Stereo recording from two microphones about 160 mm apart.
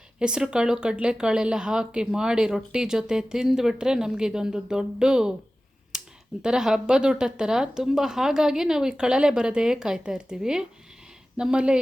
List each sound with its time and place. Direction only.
0.2 s speech: 5° right (ahead or behind)
5.9 s a sound: 5° right (ahead or behind)
6.4 s speech: 5° right (ahead or behind)